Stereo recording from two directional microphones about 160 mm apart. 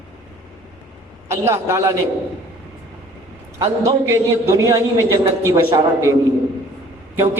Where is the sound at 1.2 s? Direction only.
15° right (ahead or behind).